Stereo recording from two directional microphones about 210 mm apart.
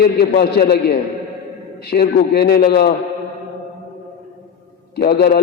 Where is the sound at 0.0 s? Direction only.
50° left (ahead or behind).